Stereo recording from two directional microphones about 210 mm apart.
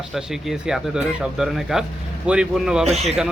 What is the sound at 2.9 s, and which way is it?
Speech, 30° right (ahead or behind).